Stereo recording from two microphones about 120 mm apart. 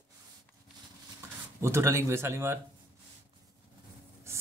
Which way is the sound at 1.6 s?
20° right (ahead or behind).